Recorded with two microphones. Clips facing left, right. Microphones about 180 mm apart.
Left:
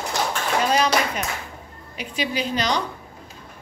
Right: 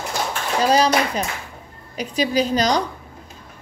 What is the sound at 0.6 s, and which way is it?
A woman's voice, 35° right (ahead or behind).